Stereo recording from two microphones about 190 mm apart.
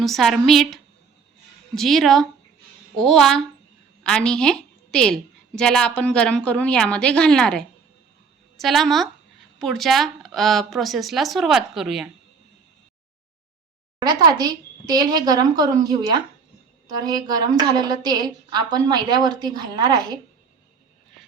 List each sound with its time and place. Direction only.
0.0 s a woman's voice: centre (ahead or behind)
14.0 s a woman's voice: 20° right (ahead or behind)